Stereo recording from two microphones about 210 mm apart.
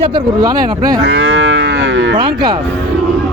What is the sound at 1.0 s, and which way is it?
Livestock, 65° right (ahead or behind).